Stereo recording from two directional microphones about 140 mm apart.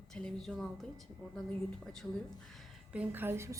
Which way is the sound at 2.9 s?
15° right (ahead or behind).